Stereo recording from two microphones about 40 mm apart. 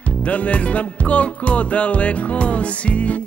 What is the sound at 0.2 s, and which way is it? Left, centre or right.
Music, left.